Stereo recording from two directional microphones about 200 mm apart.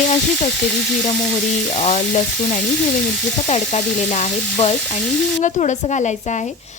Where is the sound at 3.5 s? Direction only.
35° left (ahead or behind).